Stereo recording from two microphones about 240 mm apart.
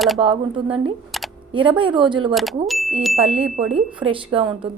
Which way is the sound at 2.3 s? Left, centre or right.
Centre.